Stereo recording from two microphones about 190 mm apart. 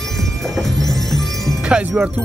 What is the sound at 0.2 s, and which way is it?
Music, centre (ahead or behind).